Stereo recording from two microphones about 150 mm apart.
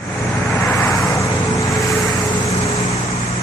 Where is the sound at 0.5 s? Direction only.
15° left (ahead or behind).